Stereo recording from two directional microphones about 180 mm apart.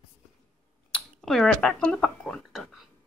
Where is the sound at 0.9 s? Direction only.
Centre (ahead or behind).